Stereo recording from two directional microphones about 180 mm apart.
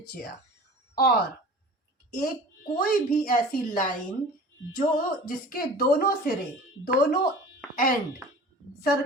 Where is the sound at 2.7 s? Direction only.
50° left (ahead or behind).